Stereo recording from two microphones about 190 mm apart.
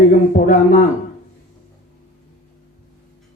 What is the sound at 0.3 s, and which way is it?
Speech, 40° left (ahead or behind).